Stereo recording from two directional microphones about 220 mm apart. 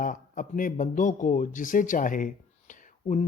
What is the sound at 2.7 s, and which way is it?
Whispering, 35° left (ahead or behind).